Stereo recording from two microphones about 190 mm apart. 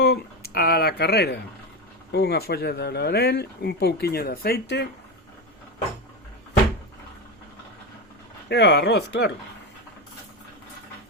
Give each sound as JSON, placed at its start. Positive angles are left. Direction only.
{"t": 0.0, "sound": "speech", "side_deg": 60}
{"t": 8.4, "sound": "speech", "side_deg": 60}